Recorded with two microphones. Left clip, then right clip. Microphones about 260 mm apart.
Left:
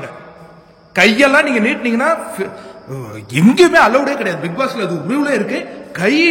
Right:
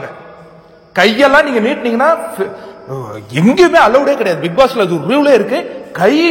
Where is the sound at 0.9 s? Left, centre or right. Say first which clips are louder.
Right 2 dB; centre.